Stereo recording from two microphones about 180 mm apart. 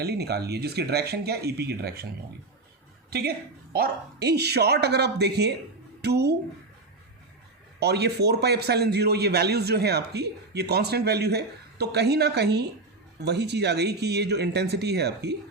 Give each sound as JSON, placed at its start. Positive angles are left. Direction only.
{"t": 0.0, "sound": "a man's voice", "side_deg": -65}
{"t": 3.1, "sound": "a man's voice", "side_deg": -60}
{"t": 7.8, "sound": "a man's voice", "side_deg": -65}